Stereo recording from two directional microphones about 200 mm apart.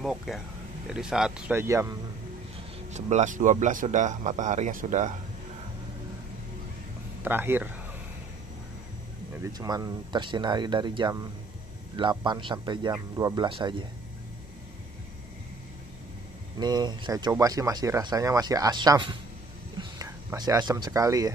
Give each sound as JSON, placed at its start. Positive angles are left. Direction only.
{"t": 0.0, "sound": "speech", "side_deg": 0}
{"t": 2.9, "sound": "speech", "side_deg": -35}
{"t": 7.2, "sound": "speech", "side_deg": -10}
{"t": 9.4, "sound": "speech", "side_deg": -20}
{"t": 16.5, "sound": "speech", "side_deg": -20}